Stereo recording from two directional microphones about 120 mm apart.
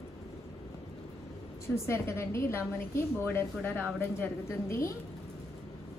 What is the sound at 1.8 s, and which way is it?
A woman's voice, 20° left (ahead or behind).